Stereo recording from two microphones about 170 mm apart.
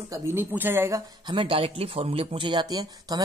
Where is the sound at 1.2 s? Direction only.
30° right (ahead or behind).